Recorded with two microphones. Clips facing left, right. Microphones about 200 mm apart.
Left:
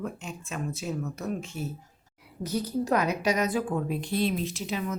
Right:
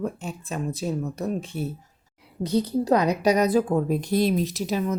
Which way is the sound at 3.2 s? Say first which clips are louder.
Right 6 dB; 35° right (ahead or behind).